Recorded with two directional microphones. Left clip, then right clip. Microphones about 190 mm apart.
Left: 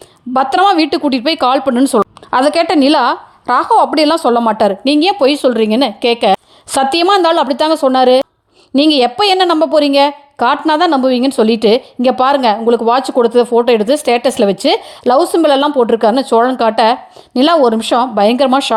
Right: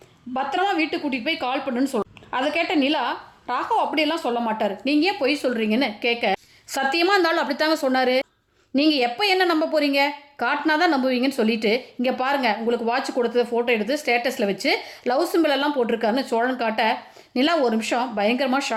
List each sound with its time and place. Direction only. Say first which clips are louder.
0.3 s speech: left 12 dB; 45° left (ahead or behind)